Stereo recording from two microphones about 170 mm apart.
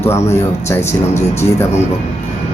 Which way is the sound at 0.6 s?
15° left (ahead or behind).